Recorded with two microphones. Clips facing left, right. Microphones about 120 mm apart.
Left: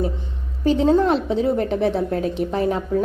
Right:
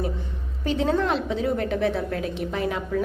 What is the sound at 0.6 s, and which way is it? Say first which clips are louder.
A woman's voice: left 7 dB; 35° left (ahead or behind).